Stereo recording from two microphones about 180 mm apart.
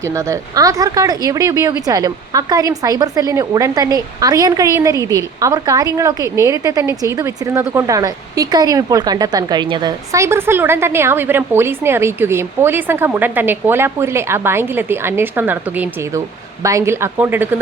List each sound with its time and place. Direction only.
0.0 s speech: 15° right (ahead or behind)